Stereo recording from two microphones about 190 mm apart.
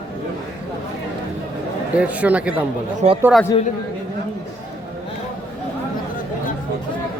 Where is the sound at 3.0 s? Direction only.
35° right (ahead or behind).